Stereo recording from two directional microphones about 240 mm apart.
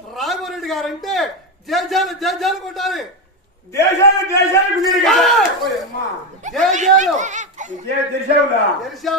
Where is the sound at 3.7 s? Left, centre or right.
Centre.